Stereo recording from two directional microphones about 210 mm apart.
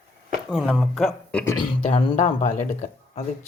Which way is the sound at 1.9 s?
25° left (ahead or behind).